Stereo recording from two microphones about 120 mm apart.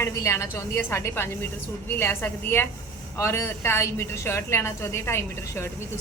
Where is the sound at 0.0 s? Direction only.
25° left (ahead or behind).